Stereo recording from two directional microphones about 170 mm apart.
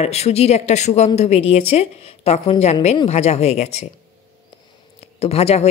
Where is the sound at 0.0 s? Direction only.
40° left (ahead or behind).